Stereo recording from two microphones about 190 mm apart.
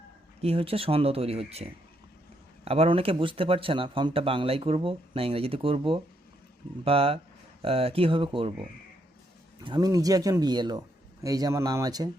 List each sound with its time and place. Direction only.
0.4 s speech: 30° right (ahead or behind)
9.6 s speech: 20° right (ahead or behind)